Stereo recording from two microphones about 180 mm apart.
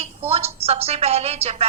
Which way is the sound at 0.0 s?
35° right (ahead or behind).